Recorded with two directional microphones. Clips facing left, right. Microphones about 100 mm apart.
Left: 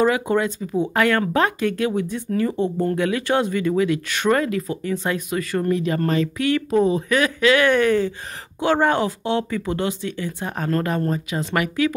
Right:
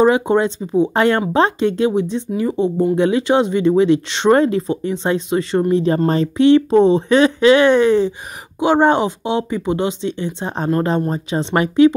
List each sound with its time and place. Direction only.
0.0 s speech: 25° right (ahead or behind)